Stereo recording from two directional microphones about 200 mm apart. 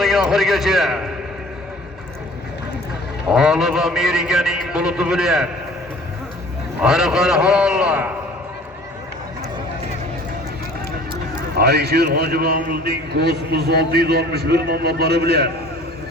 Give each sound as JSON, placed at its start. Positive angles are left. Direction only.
{"t": 0.0, "sound": "a man's voice", "side_deg": 0}
{"t": 3.3, "sound": "a man's voice", "side_deg": -5}
{"t": 6.8, "sound": "a man's voice", "side_deg": -5}
{"t": 11.5, "sound": "a man's voice", "side_deg": -55}